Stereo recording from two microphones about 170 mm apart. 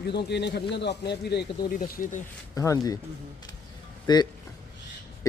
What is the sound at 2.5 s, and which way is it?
Speech, 20° left (ahead or behind).